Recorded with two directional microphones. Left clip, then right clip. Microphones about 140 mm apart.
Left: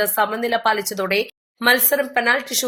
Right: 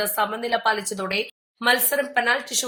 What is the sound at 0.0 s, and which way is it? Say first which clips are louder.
Speech: left 4 dB; 35° left (ahead or behind).